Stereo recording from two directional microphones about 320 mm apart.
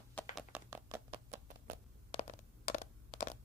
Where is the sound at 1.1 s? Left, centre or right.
Right.